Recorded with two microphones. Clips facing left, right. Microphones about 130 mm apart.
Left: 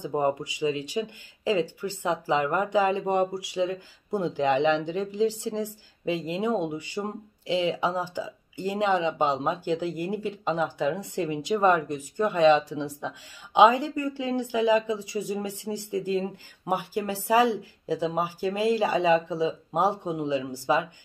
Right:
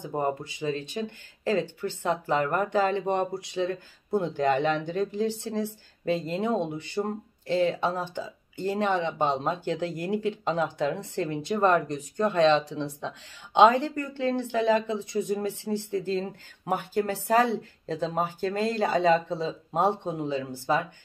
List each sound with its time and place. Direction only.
0.0 s speech: 15° left (ahead or behind)